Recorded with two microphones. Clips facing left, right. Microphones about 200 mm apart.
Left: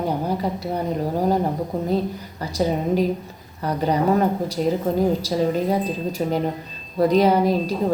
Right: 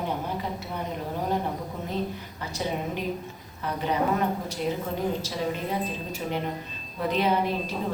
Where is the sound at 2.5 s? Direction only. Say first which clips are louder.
Left 10 dB; 40° left (ahead or behind).